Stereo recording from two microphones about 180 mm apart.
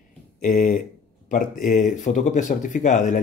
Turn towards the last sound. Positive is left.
turn(degrees=45)  # may be behind; listen again after turning